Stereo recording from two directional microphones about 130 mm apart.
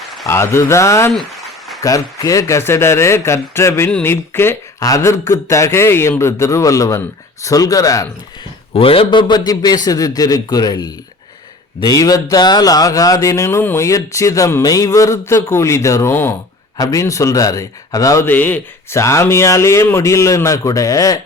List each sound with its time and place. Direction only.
0.3 s speech: 20° left (ahead or behind)
1.1 s a sound: centre (ahead or behind)
1.8 s speech: 25° left (ahead or behind)
8.7 s a man's voice: 45° left (ahead or behind); by 21.2 s 25° left (ahead or behind)